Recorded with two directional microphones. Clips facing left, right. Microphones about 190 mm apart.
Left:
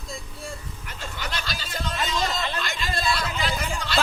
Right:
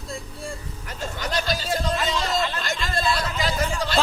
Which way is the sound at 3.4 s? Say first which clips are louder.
Right 4 dB; 35° right (ahead or behind).